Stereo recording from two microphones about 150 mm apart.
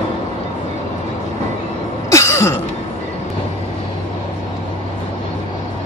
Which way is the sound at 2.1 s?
20° left (ahead or behind).